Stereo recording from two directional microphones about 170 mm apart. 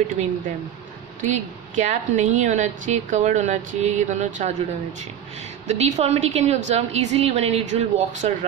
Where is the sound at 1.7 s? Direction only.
45° right (ahead or behind).